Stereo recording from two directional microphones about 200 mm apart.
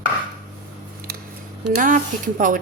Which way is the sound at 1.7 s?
40° right (ahead or behind).